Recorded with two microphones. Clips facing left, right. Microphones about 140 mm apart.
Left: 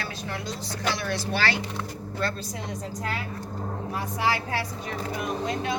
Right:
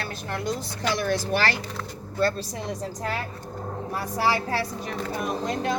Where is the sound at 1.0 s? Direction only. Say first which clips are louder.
Right 4 dB; 45° right (ahead or behind).